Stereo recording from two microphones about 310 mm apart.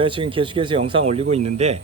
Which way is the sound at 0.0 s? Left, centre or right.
Centre.